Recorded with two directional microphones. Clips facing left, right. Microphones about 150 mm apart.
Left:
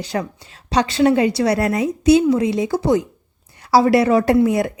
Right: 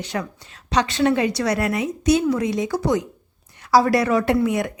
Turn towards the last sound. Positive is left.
turn(degrees=35)  # may be behind; listen again after turning